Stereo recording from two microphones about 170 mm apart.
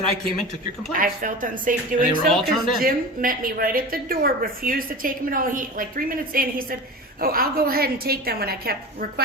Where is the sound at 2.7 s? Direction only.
55° right (ahead or behind).